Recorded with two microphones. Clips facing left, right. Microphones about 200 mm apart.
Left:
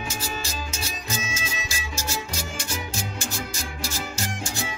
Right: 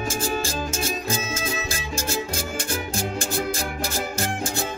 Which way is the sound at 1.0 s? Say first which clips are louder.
Right 5 dB; 55° right (ahead or behind).